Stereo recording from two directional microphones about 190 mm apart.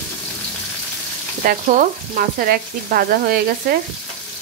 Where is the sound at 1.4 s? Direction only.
45° right (ahead or behind).